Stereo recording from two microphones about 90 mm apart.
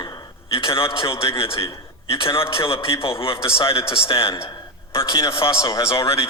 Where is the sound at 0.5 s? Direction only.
90° left.